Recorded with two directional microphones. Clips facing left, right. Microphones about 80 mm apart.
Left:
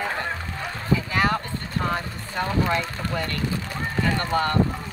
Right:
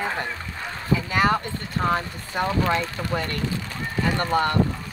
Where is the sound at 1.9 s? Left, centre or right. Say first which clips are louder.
Right 2 dB; centre.